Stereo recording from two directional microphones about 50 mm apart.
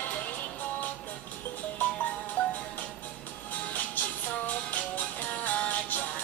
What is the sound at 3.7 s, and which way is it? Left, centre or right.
Music, left.